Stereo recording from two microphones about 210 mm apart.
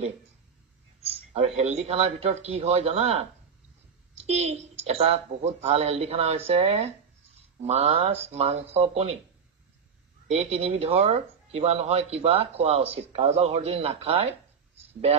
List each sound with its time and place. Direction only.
1.1 s a sound: 30° right (ahead or behind)
1.6 s speech: 30° right (ahead or behind)
4.2 s speech: 30° right (ahead or behind)
10.3 s speech: 30° right (ahead or behind)